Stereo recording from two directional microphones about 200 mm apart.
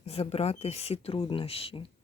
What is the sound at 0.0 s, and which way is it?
Speech, 30° left (ahead or behind).